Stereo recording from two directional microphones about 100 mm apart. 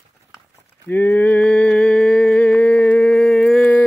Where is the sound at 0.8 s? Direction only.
20° left (ahead or behind).